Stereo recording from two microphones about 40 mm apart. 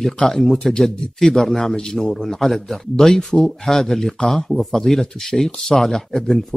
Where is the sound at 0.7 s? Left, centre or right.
Centre.